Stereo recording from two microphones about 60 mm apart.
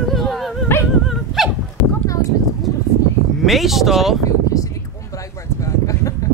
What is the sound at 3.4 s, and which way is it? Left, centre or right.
Speech, centre.